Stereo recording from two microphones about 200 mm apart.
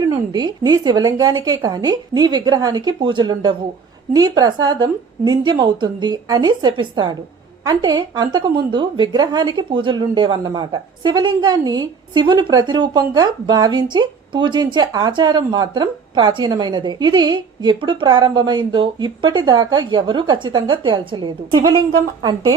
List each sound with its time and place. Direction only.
0.3 s a woman's voice: 20° right (ahead or behind)